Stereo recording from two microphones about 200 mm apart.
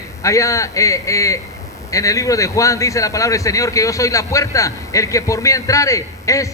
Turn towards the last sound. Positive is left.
turn(degrees=15)  # may be behind; listen again after turning